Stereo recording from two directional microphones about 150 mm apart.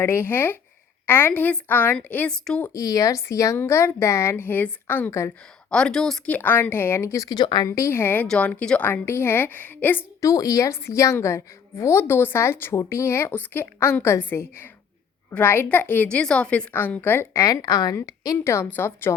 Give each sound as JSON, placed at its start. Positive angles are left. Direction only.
{"t": 0.0, "sound": "a woman's voice", "side_deg": 15}
{"t": 2.7, "sound": "a woman's voice", "side_deg": 25}
{"t": 5.7, "sound": "a woman's voice", "side_deg": 5}
{"t": 7.7, "sound": "a woman's voice", "side_deg": 15}